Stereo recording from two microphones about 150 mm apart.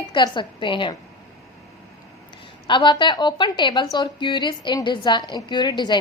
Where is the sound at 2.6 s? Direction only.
30° left (ahead or behind).